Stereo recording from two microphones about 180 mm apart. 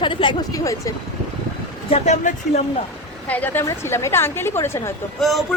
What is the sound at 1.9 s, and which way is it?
Speech, 35° left (ahead or behind).